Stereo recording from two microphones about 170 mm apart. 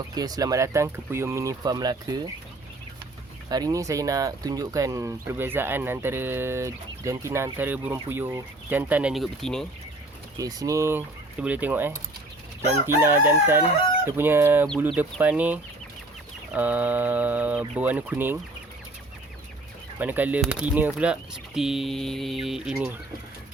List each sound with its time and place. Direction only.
0.1 s speech: 20° right (ahead or behind)
3.5 s speech: 20° right (ahead or behind); by 9.6 s centre (ahead or behind)
10.3 s speech: 20° right (ahead or behind)
14.2 s speech: 15° right (ahead or behind)
20.0 s speech: 10° right (ahead or behind)